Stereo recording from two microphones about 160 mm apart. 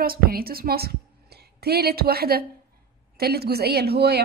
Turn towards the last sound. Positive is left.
turn(degrees=-85)